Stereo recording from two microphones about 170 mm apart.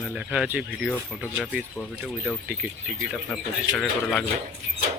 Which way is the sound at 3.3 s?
5° left (ahead or behind).